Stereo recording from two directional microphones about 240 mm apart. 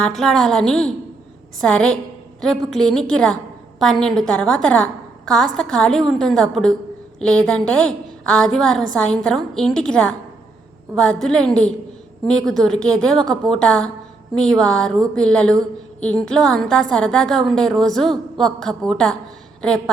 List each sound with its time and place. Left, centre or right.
0.0 s a woman's voice: centre